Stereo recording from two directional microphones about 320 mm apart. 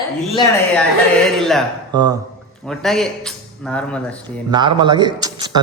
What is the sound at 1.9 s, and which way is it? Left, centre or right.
Speech, centre.